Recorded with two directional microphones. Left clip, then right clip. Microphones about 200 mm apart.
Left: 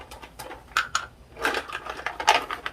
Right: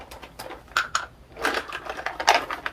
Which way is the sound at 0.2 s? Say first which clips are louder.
Right 2 dB; 30° right (ahead or behind).